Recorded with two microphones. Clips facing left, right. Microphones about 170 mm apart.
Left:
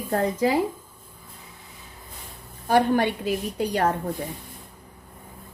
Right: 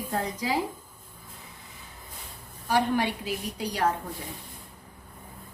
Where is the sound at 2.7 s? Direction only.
55° left (ahead or behind).